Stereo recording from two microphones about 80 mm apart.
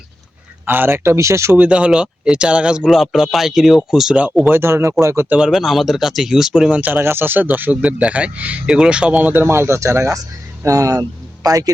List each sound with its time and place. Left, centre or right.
0.6 s speech: right
1.5 s speech: centre
4.1 s speech: centre; by 5.3 s right
5.4 s speech: centre; by 11.7 s right